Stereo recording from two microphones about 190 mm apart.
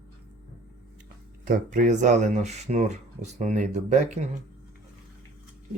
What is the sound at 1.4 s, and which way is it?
Speech, 45° right (ahead or behind).